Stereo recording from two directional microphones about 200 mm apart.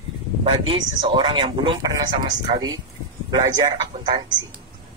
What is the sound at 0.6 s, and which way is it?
Speech, 25° right (ahead or behind).